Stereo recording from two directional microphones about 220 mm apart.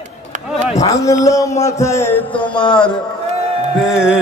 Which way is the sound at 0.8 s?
15° left (ahead or behind).